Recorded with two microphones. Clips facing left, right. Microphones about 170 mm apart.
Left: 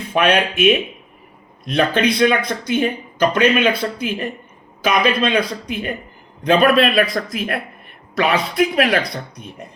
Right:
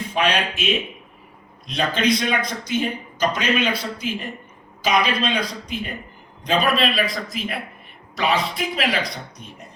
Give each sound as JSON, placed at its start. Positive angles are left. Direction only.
{"t": 0.1, "sound": "speech", "side_deg": 55}